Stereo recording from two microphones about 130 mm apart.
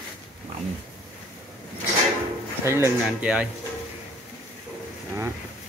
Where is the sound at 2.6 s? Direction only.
20° right (ahead or behind).